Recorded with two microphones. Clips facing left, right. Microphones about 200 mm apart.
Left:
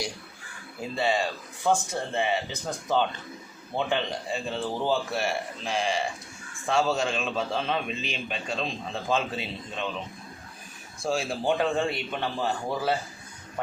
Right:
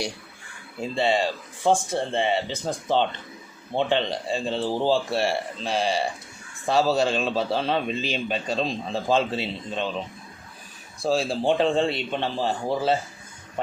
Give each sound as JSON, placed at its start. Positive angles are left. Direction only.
{"t": 0.8, "sound": "a man's voice", "side_deg": -25}
{"t": 11.0, "sound": "speech", "side_deg": -30}